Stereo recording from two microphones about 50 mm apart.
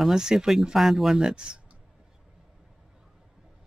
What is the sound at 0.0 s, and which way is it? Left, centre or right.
Speech, centre.